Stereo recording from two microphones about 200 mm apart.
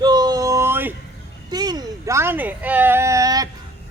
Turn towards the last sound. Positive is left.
turn(degrees=-15)  # may be behind; listen again after turning